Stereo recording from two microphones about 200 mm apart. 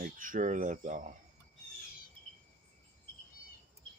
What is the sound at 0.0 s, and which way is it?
Speech, 40° right (ahead or behind).